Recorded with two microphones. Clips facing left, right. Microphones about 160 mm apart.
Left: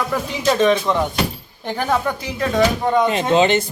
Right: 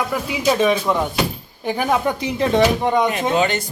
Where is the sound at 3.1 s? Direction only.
25° left (ahead or behind).